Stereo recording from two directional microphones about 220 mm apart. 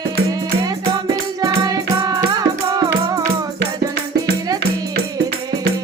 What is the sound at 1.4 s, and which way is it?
Music, 15° right (ahead or behind).